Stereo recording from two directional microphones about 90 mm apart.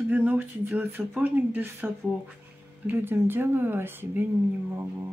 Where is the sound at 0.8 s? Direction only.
25° right (ahead or behind).